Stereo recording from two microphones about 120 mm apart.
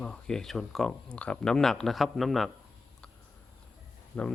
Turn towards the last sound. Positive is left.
turn(degrees=10)  # may be behind; listen again after turning